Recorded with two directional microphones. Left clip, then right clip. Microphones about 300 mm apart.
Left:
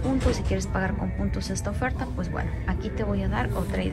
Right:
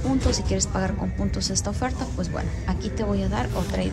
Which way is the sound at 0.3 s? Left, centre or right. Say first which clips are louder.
Right 2 dB; centre.